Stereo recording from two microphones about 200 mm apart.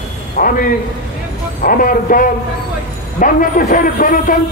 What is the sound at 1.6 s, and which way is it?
A man's voice, 45° left (ahead or behind).